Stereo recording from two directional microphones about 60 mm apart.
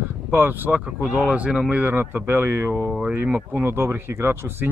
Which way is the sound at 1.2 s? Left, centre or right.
Right.